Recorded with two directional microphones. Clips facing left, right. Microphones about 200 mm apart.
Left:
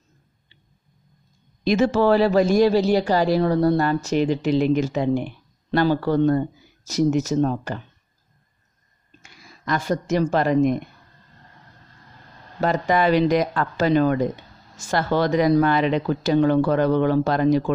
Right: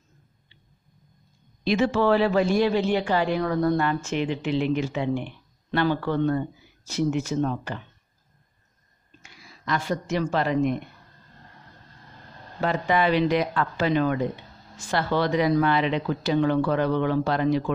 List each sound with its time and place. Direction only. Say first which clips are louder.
1.6 s speech: left 4 dB; 45° left (ahead or behind)
9.2 s a woman's voice: left 3 dB; 45° left (ahead or behind)
12.5 s speech: left 3 dB; 40° left (ahead or behind)